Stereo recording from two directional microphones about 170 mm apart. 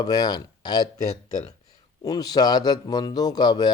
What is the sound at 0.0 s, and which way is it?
Speech, 25° left (ahead or behind).